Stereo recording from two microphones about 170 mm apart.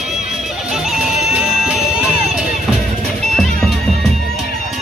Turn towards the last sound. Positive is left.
turn(degrees=0)  # may be behind; listen again after turning